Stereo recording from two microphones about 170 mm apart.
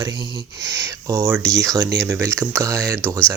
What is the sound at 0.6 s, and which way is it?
Speech, 20° right (ahead or behind).